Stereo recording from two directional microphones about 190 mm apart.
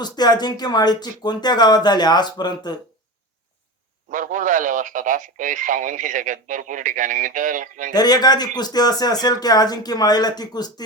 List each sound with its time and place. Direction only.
0.0 s speech: 20° left (ahead or behind)
4.1 s speech: 45° right (ahead or behind)
7.9 s speech: 20° left (ahead or behind)